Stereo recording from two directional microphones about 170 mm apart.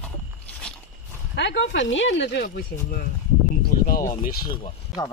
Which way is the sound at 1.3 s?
90° left.